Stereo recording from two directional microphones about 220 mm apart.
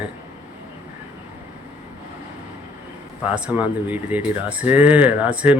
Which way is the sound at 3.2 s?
5° right (ahead or behind).